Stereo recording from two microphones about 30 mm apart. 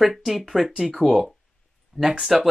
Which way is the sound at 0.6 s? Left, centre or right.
Right.